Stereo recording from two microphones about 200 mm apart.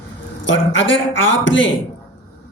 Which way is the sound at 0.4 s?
70° left (ahead or behind).